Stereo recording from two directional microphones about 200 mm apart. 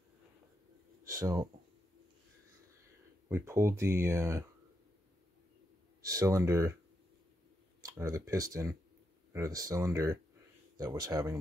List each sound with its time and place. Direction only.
1.0 s speech: 15° right (ahead or behind)
3.3 s speech: 15° right (ahead or behind)
6.0 s speech: 15° right (ahead or behind)
7.8 s speech: 15° right (ahead or behind)